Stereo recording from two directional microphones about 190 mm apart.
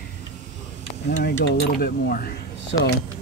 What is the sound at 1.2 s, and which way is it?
Speech, 65° left (ahead or behind).